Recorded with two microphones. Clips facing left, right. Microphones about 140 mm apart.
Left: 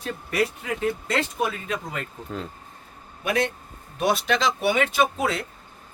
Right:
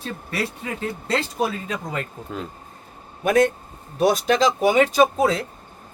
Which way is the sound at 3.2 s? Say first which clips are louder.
Right 7 dB; 45° right (ahead or behind).